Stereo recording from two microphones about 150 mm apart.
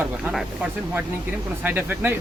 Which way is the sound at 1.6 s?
10° right (ahead or behind).